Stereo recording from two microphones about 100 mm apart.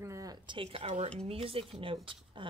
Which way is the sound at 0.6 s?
80° right.